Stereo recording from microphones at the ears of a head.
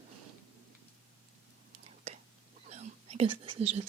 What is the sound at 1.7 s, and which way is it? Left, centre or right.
Whispering, right.